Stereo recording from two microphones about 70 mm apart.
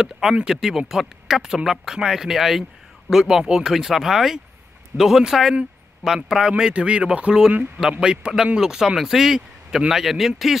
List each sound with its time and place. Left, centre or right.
0.0 s speech: centre